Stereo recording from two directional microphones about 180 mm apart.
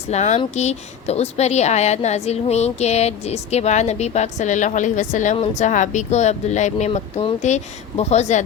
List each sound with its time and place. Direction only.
0.1 s speech: 40° left (ahead or behind)